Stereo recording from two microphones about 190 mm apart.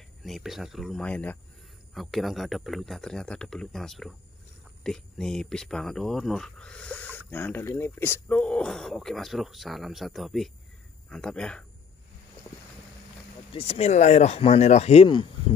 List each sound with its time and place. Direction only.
0.2 s speech: centre (ahead or behind)
13.5 s speech: 30° left (ahead or behind)